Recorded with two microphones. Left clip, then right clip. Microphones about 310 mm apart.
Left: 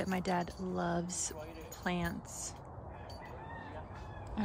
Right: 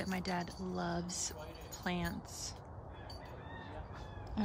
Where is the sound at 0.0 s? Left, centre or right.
Centre.